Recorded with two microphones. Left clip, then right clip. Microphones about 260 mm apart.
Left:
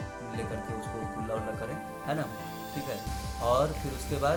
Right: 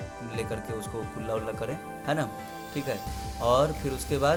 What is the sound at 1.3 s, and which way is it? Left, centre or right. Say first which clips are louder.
Speech: right 5 dB; right.